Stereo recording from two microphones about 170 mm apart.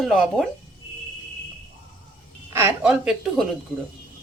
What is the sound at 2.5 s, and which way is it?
Speech, 15° right (ahead or behind).